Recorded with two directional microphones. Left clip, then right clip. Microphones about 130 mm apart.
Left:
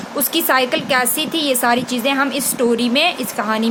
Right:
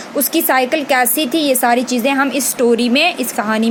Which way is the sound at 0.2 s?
25° right (ahead or behind).